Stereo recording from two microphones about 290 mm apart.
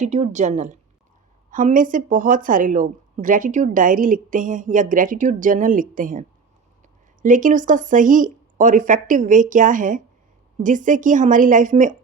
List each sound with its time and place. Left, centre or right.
0.0 s speech: right